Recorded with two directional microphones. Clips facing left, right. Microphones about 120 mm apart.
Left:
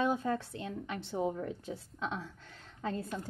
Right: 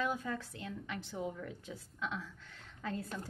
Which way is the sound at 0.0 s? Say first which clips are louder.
Left 6 dB; 30° left (ahead or behind).